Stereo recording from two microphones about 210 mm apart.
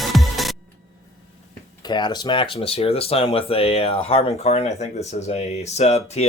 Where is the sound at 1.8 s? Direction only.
20° left (ahead or behind).